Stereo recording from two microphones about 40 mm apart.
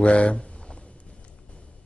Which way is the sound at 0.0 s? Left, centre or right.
Left.